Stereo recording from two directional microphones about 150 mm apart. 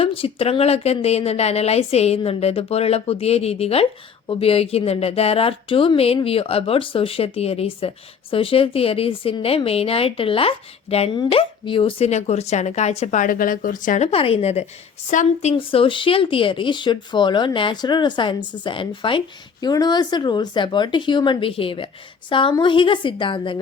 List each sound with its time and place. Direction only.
0.0 s speech: 40° left (ahead or behind); by 14.1 s 60° left (ahead or behind)
14.1 s speech: 40° left (ahead or behind)
15.1 s speech: 55° left (ahead or behind); by 23.6 s 35° left (ahead or behind)